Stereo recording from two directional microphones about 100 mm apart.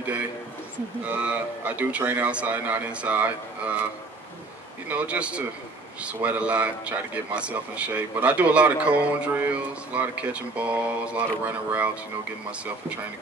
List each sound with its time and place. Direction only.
1.0 s speech: 15° right (ahead or behind)
4.8 s speech: 15° right (ahead or behind)